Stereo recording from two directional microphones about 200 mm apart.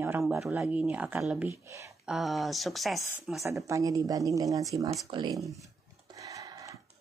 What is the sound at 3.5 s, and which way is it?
Speech, 15° right (ahead or behind).